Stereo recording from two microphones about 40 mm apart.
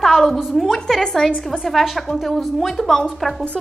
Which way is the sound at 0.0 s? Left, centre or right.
Centre.